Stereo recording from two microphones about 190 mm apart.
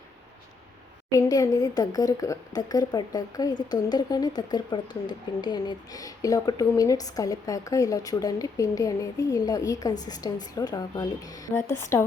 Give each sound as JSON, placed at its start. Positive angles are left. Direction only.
{"t": 1.1, "sound": "speech", "side_deg": 20}